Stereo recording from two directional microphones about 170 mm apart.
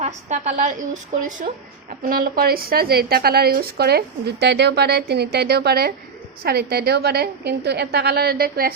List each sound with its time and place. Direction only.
0.0 s a woman's voice: 40° right (ahead or behind)
2.0 s a woman's voice: 60° right (ahead or behind)